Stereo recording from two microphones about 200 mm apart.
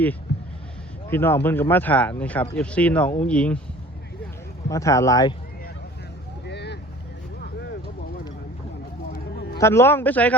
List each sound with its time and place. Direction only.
0.3 s a sound: 55° left (ahead or behind)
1.1 s speech: 10° left (ahead or behind)
4.7 s speech: 15° left (ahead or behind)
6.5 s vehicle: 55° left (ahead or behind)
9.6 s speech: 15° left (ahead or behind)